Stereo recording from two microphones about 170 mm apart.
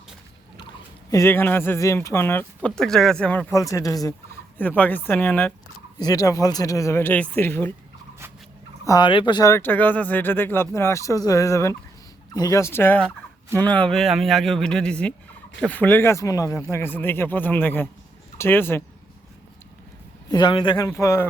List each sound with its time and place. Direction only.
1.1 s a man's voice: 15° left (ahead or behind)
3.5 s speech: 20° left (ahead or behind)
6.0 s speech: 20° left (ahead or behind)
8.8 s a man's voice: 25° left (ahead or behind)
20.3 s speech: 30° left (ahead or behind)